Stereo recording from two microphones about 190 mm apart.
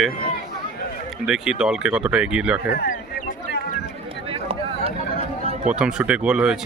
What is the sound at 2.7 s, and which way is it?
Speech, 60° left (ahead or behind).